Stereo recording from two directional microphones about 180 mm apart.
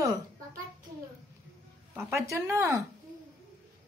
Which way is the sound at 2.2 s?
15° right (ahead or behind).